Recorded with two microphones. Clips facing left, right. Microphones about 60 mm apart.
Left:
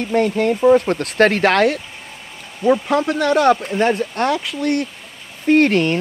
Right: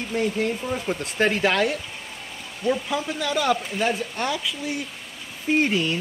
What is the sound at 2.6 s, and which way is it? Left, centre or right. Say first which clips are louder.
Speech: left 9 dB; left.